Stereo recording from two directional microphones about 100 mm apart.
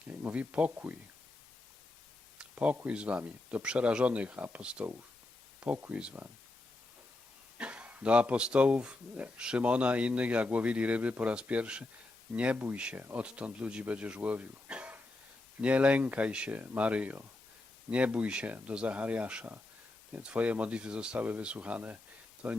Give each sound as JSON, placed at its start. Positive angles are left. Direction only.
{"t": 0.1, "sound": "speech", "side_deg": -15}
{"t": 2.4, "sound": "speech", "side_deg": -15}
{"t": 7.6, "sound": "speech", "side_deg": -15}